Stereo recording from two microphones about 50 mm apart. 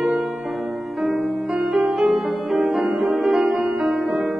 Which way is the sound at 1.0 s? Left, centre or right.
Centre.